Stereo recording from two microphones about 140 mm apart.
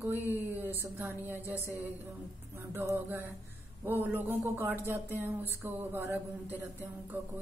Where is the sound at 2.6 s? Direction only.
15° right (ahead or behind).